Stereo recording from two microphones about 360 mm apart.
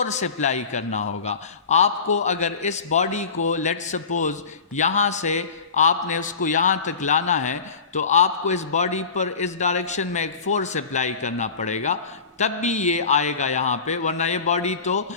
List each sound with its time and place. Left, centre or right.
0.0 s a man's voice: centre